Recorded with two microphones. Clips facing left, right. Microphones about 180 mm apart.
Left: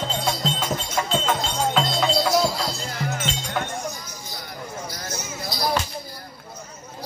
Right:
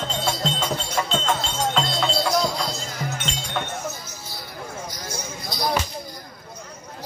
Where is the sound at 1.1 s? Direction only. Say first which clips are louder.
Left 1 dB; 5° left (ahead or behind).